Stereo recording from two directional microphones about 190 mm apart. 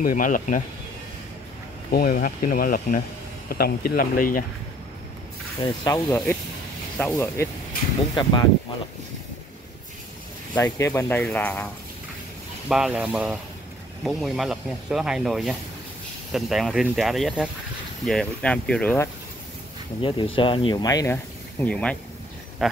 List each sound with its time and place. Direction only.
0.0 s speech: 45° left (ahead or behind)
1.9 s speech: 55° left (ahead or behind)
5.9 s speech: 15° left (ahead or behind)
8.1 s speech: 25° left (ahead or behind)
10.5 s speech: 15° left (ahead or behind)
12.6 s speech: 5° right (ahead or behind)
20.0 s speech: 25° left (ahead or behind); by 22.8 s centre (ahead or behind)